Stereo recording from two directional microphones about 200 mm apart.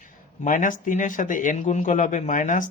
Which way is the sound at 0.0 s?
40° left (ahead or behind).